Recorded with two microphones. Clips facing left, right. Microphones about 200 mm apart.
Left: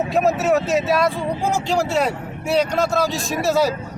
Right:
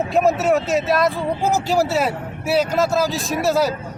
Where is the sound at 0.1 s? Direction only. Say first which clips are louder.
Right 1 dB; centre (ahead or behind).